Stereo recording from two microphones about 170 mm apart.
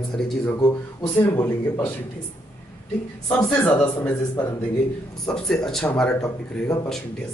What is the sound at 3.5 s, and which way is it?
Speech, 5° left (ahead or behind).